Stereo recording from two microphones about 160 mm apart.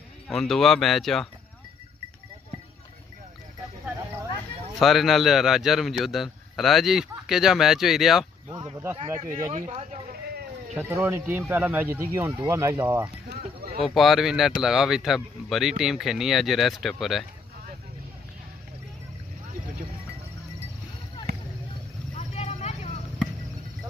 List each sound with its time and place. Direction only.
0.3 s a man's voice: centre (ahead or behind)
4.7 s a man's voice: centre (ahead or behind)
9.0 s speech: 20° right (ahead or behind)
9.5 s speech: 45° right (ahead or behind)
10.8 s speech: 15° right (ahead or behind)
13.4 s a sound: 70° right (ahead or behind)
13.7 s a man's voice: centre (ahead or behind)
22.1 s vehicle: 45° left (ahead or behind)